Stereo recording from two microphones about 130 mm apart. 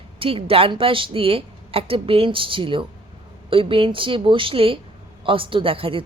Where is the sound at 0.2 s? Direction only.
45° right (ahead or behind).